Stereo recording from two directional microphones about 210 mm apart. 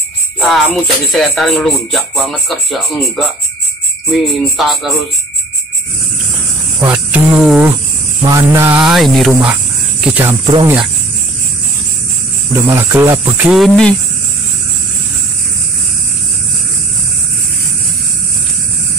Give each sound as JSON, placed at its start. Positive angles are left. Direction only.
{"t": 0.4, "sound": "music", "side_deg": 0}
{"t": 4.1, "sound": "music", "side_deg": 0}
{"t": 6.8, "sound": "speech", "side_deg": -10}
{"t": 8.8, "sound": "music", "side_deg": 0}
{"t": 9.5, "sound": "cricket", "side_deg": -5}
{"t": 10.4, "sound": "speech", "side_deg": -20}
{"t": 12.5, "sound": "speech", "side_deg": -10}